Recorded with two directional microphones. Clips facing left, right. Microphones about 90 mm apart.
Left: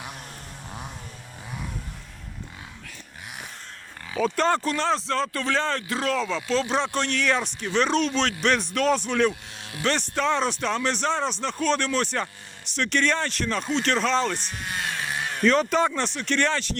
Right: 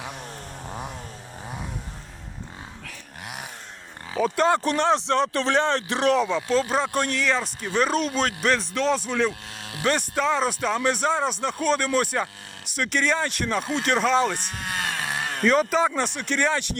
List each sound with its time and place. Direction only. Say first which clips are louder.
0.7 s chainsaw: right 4 dB; 25° right (ahead or behind)
4.2 s speech: right 2 dB; 10° right (ahead or behind)
6.6 s speech: right 1 dB; 5° right (ahead or behind)
7.2 s speech: even; centre (ahead or behind)
14.3 s sheep: right 1 dB; 55° right (ahead or behind)
15.4 s speech: even; 5° right (ahead or behind)